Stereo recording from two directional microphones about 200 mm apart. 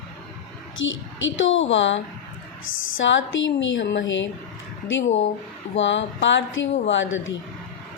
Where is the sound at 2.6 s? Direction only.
80° left.